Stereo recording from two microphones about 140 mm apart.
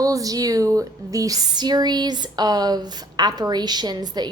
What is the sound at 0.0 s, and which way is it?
A woman's voice, 25° right (ahead or behind).